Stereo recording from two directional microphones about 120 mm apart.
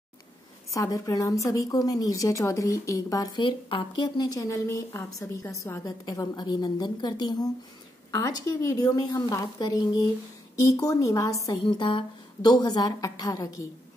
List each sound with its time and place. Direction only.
0.7 s a woman's voice: 30° left (ahead or behind)
11.6 s a woman's voice: 40° left (ahead or behind); by 13.7 s 25° left (ahead or behind)